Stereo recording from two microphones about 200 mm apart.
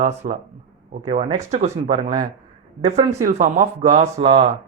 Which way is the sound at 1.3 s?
35° right (ahead or behind).